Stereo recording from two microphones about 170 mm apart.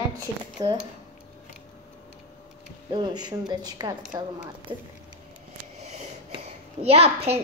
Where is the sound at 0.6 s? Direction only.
25° right (ahead or behind).